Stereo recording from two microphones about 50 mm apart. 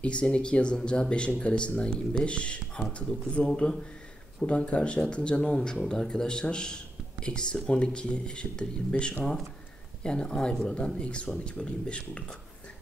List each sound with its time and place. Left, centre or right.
0.0 s speech: left